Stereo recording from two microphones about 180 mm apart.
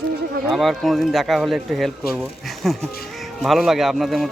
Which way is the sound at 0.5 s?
Centre (ahead or behind).